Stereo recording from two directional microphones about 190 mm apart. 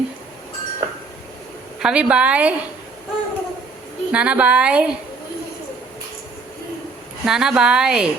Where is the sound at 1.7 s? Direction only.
5° right (ahead or behind).